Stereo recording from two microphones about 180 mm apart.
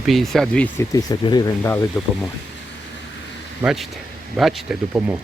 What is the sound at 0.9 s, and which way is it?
Speech, 20° left (ahead or behind).